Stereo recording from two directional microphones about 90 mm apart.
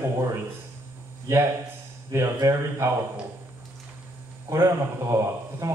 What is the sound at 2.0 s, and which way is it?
Speech, 35° right (ahead or behind).